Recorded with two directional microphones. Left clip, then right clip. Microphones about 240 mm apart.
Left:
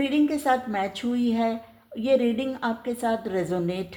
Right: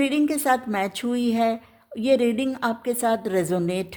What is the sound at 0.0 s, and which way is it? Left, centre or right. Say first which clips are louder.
A woman's voice: right 1 dB; right.